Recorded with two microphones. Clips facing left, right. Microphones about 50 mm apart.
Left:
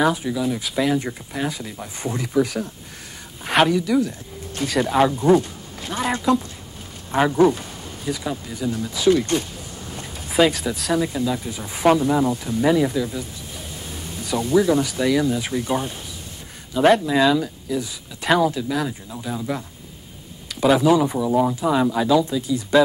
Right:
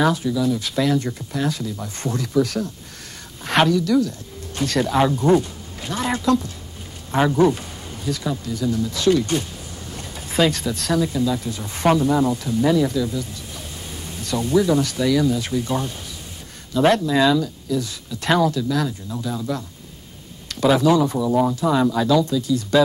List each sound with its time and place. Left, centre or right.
0.0 s speech: centre
8.9 s speech: centre
10.3 s speech: centre
14.2 s speech: centre
17.0 s speech: centre
20.4 s speech: centre
21.3 s speech: centre
21.5 s speech: centre